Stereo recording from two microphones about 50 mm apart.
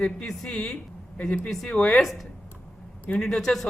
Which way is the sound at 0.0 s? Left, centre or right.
Centre.